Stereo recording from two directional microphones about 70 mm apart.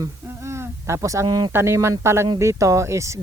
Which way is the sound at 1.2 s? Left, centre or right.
Right.